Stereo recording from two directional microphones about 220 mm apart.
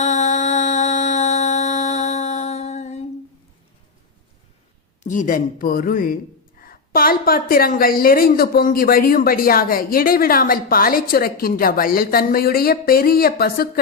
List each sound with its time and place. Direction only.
0.0 s music: 30° left (ahead or behind)
5.0 s a woman's voice: 35° left (ahead or behind)